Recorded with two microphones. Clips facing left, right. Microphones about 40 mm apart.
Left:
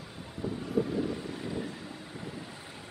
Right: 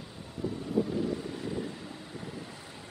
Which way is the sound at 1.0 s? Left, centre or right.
Centre.